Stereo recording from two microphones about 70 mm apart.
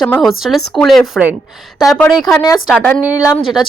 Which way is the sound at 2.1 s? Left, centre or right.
Centre.